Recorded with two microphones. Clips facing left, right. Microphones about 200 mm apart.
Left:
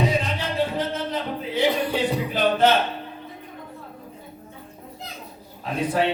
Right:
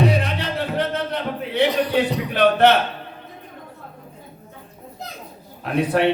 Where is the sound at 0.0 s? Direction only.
65° right (ahead or behind).